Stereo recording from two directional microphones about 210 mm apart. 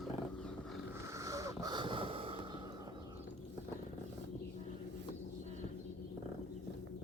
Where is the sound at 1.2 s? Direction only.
15° right (ahead or behind).